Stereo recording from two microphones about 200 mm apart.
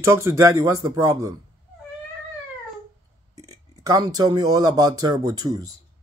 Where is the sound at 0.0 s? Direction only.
15° right (ahead or behind).